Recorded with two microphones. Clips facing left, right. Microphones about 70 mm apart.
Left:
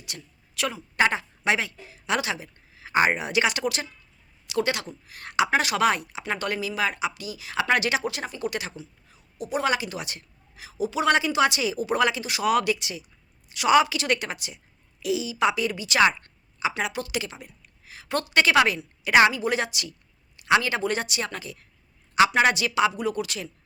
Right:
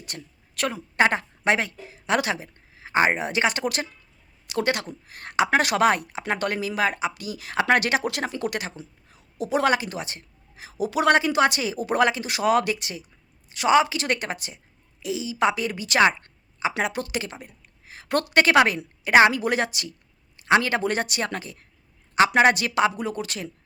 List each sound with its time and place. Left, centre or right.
0.0 s a woman's voice: right
8.0 s speech: right
8.5 s speech: right
9.4 s speech: right
9.6 s speech: right
10.8 s speech: right
16.0 s a sound: right
16.8 s speech: right
18.1 s speech: right